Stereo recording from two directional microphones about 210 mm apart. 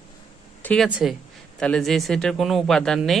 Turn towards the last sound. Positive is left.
turn(degrees=0)  # may be behind; listen again after turning